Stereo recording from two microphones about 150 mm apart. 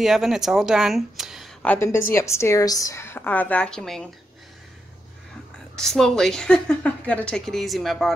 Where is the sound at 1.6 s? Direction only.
15° left (ahead or behind).